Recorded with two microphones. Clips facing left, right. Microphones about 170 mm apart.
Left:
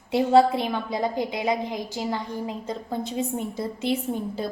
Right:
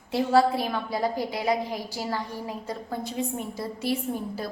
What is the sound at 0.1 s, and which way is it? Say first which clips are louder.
A woman's voice: left 3 dB; 25° left (ahead or behind).